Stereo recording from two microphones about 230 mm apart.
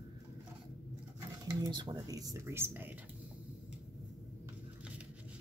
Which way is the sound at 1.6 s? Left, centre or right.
Centre.